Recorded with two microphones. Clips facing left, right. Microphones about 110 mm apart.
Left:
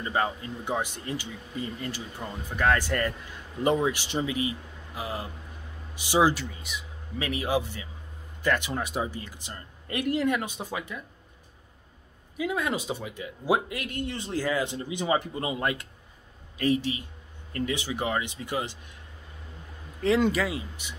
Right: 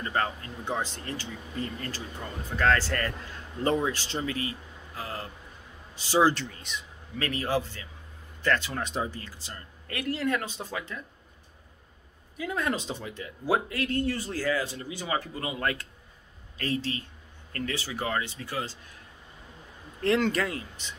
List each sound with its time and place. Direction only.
0.0 s speech: 15° left (ahead or behind)
12.4 s speech: 15° left (ahead or behind)
20.2 s speech: 10° left (ahead or behind)